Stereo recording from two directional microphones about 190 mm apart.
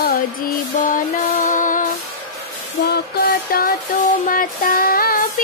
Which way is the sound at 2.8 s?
55° left (ahead or behind).